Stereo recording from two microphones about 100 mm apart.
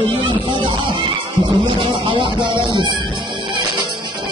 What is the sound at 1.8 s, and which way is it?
Music, 55° right (ahead or behind).